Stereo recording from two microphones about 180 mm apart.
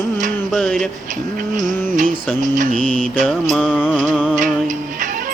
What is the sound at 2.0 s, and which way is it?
Music, 45° right (ahead or behind).